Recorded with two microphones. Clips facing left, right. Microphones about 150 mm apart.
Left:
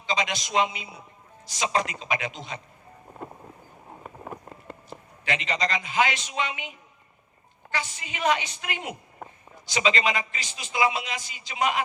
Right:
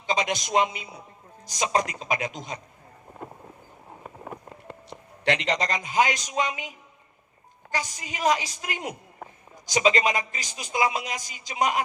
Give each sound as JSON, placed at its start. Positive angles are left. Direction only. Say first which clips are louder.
{"t": 0.1, "sound": "a man's voice", "louder": "right 2 dB", "side_deg": -50}
{"t": 5.2, "sound": "speech", "louder": "right 4 dB", "side_deg": -70}
{"t": 5.6, "sound": "a woman's voice", "louder": "left 1 dB", "side_deg": -45}